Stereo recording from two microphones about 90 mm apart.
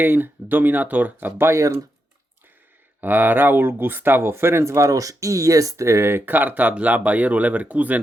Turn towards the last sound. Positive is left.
turn(degrees=-15)  # may be behind; listen again after turning